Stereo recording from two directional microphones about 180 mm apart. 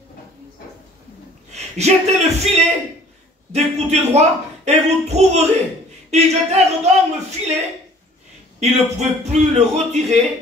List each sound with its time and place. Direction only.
1.5 s a woman's voice: 40° right (ahead or behind)
8.5 s speech: 40° right (ahead or behind)